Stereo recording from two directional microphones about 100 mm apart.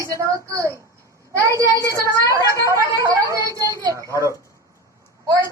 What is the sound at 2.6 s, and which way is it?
A woman's voice, 30° right (ahead or behind).